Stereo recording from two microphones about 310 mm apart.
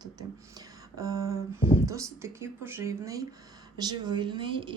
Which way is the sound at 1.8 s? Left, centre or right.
Centre.